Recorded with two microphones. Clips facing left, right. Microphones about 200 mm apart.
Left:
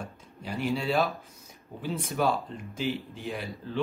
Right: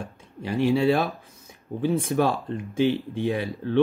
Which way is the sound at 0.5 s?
70° right (ahead or behind).